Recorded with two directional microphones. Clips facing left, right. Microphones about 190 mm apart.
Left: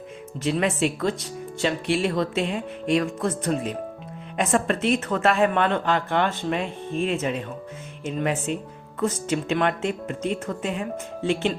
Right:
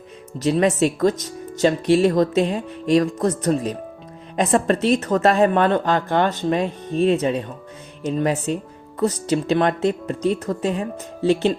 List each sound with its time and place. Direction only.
0.3 s speech: 40° right (ahead or behind)